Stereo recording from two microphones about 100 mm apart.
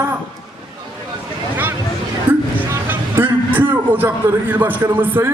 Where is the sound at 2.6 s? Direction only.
20° right (ahead or behind).